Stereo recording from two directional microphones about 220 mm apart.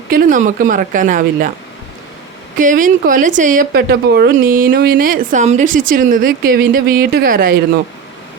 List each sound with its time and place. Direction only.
0.1 s speech: 35° right (ahead or behind)
2.6 s speech: 35° right (ahead or behind)